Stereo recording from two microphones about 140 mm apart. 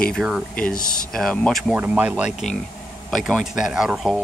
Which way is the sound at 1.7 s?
10° right (ahead or behind).